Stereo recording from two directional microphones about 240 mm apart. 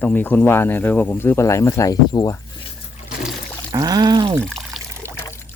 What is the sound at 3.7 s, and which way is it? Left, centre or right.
Speech, centre.